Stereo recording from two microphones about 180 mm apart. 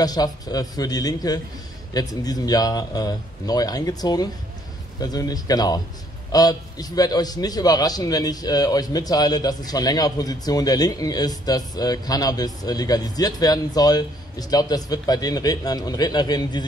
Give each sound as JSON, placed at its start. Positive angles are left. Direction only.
{"t": 0.0, "sound": "a man's voice", "side_deg": 20}